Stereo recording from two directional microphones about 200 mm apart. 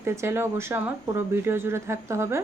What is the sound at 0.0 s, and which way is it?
A woman's voice, 10° right (ahead or behind).